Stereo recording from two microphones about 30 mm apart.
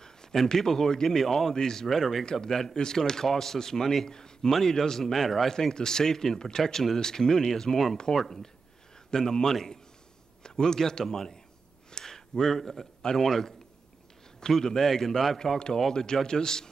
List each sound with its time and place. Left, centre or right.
0.0 s a sound: left
0.6 s speech: centre
1.2 s speech: centre
1.5 s speech: centre
1.9 s speech: centre
2.7 s speech: left
11.9 s a sound: centre
13.0 s speech: centre
14.6 s speech: centre
15.9 s speech: centre